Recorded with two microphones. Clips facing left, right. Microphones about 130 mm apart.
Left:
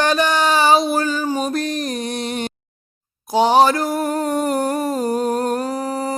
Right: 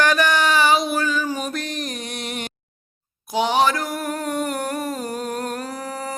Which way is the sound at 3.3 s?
35° left (ahead or behind).